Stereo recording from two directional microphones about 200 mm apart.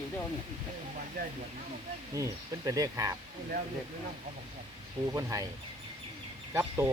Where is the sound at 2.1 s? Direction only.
15° right (ahead or behind).